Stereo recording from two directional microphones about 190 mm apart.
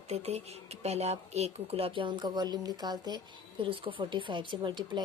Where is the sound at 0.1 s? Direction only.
35° right (ahead or behind).